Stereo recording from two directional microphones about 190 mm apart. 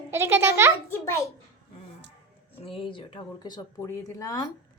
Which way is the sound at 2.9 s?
25° left (ahead or behind).